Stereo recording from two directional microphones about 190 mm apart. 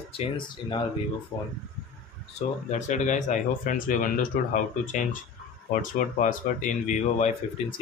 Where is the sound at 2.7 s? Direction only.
40° left (ahead or behind).